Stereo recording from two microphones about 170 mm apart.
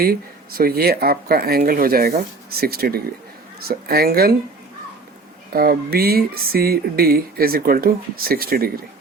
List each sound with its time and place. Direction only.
0.0 s speech: 60° right (ahead or behind)
5.5 s speech: 65° right (ahead or behind)